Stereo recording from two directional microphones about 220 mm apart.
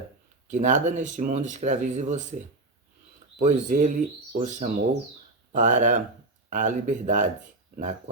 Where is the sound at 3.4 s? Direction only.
35° right (ahead or behind).